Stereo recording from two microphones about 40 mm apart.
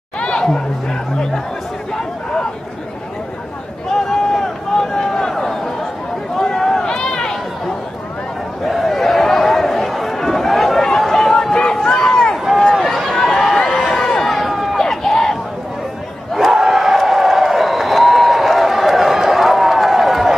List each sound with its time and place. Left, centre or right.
0.2 s chatter: left
3.9 s run: centre
5.4 s a sound: centre
6.3 s run: centre
8.6 s a sound: centre
11.0 s run: centre
12.8 s run: centre
13.6 s run: left
14.3 s run: centre
14.8 s a sound: centre
16.3 s crowd: centre